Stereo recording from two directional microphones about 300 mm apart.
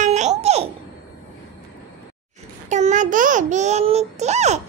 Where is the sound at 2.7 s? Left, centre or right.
Right.